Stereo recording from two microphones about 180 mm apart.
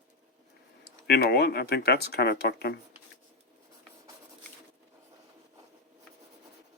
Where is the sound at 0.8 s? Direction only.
60° left (ahead or behind).